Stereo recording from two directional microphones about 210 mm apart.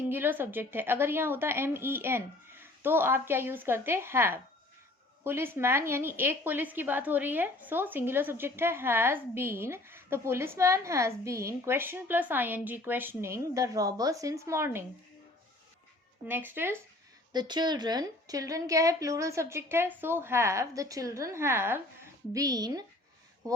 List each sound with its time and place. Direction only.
0.1 s a woman's voice: 10° right (ahead or behind)
16.2 s a woman's voice: 10° right (ahead or behind)
17.3 s a woman's voice: 20° right (ahead or behind)